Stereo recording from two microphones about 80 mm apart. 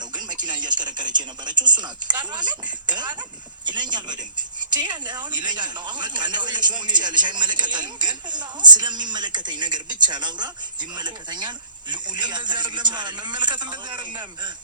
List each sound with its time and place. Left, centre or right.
0.3 s speech: right